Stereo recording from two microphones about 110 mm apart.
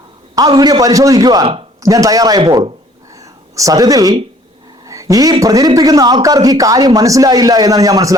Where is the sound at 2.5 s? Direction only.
45° right (ahead or behind).